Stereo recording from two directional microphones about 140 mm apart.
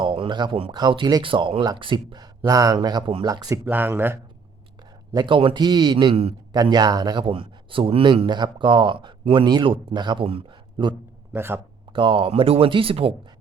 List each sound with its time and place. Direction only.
0.0 s a sound: 35° right (ahead or behind)
0.7 s speech: 30° right (ahead or behind)
3.7 s speech: 15° right (ahead or behind)
5.1 s speech: 35° right (ahead or behind)
11.3 s speech: 15° right (ahead or behind)
11.9 s speech: 40° right (ahead or behind)